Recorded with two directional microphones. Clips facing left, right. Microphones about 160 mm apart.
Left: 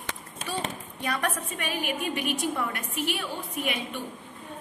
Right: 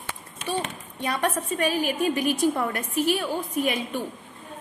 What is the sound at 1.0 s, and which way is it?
A woman's voice, 25° right (ahead or behind).